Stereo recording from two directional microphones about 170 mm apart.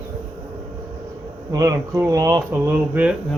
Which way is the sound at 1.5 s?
20° right (ahead or behind).